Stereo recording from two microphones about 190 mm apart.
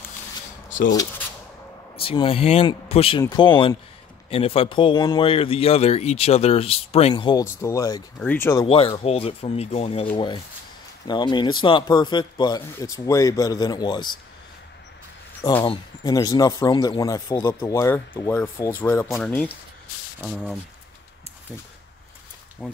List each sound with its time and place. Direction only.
2.0 s a man's voice: 30° left (ahead or behind)
7.4 s speech: 15° left (ahead or behind)
8.6 s a man's voice: 30° left (ahead or behind)
15.6 s speech: 25° left (ahead or behind); by 19.5 s 5° left (ahead or behind)
20.2 s speech: 5° right (ahead or behind)
22.6 s speech: centre (ahead or behind)